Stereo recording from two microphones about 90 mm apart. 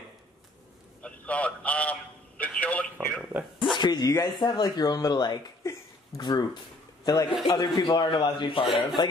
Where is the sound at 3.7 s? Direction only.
55° left (ahead or behind).